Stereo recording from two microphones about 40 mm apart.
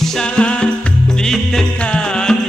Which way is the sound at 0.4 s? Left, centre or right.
Left.